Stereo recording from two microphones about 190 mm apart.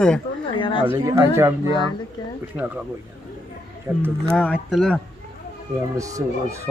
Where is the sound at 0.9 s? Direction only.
15° right (ahead or behind).